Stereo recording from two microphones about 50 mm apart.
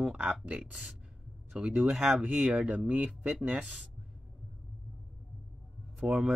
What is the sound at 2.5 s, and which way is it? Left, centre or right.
Speech, right.